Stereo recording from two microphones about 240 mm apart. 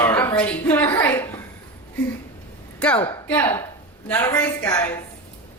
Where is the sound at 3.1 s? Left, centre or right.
Centre.